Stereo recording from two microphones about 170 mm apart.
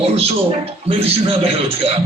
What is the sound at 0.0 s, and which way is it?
A man's voice, 35° right (ahead or behind).